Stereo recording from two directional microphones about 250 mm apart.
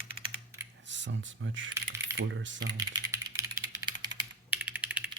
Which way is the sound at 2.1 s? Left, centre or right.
Right.